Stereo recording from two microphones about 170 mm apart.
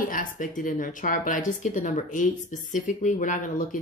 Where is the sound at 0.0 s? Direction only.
55° left (ahead or behind).